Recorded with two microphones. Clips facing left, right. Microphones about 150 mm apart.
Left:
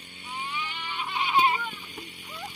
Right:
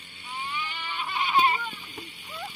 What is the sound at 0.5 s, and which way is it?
Goat, 20° left (ahead or behind).